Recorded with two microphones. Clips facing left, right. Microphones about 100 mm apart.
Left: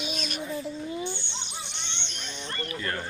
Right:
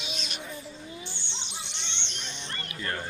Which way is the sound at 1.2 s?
90° right.